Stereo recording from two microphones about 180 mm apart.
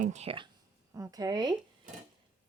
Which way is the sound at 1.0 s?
20° right (ahead or behind).